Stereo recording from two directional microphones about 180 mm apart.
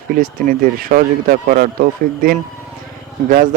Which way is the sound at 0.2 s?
50° right (ahead or behind).